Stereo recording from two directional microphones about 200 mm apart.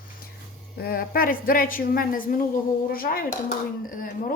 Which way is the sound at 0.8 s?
50° left (ahead or behind).